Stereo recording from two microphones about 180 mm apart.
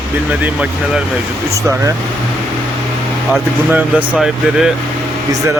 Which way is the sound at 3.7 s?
10° right (ahead or behind).